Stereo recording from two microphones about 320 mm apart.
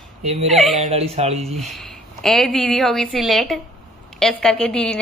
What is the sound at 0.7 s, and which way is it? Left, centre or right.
Speech, centre.